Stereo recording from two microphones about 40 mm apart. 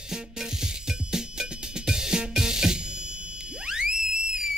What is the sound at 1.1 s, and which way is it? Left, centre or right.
Music, centre.